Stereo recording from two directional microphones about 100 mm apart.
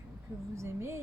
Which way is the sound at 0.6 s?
25° right (ahead or behind).